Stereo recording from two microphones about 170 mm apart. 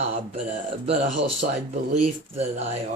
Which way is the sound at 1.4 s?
50° right (ahead or behind).